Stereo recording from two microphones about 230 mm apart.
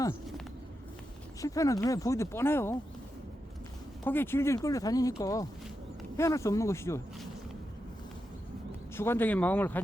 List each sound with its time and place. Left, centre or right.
1.4 s speech: centre
4.0 s speech: centre
9.0 s speech: centre